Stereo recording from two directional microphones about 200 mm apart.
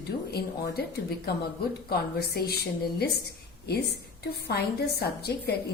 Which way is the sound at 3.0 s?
55° left (ahead or behind).